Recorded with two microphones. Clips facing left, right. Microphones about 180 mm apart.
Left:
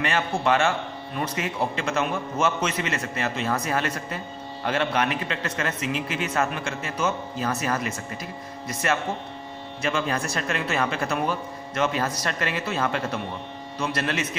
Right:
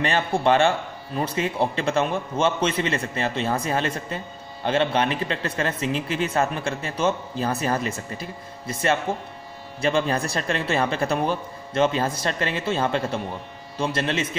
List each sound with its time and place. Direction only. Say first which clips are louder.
0.0 s a man's voice: right 3 dB; 30° right (ahead or behind)